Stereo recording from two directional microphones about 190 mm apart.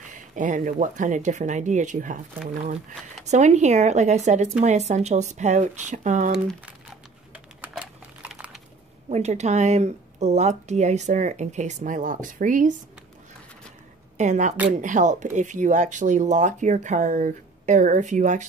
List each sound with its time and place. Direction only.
0.1 s speech: 40° right (ahead or behind)
3.3 s speech: 35° right (ahead or behind)
7.6 s typing: 5° right (ahead or behind)
9.1 s speech: 35° right (ahead or behind)
14.1 s speech: 40° right (ahead or behind)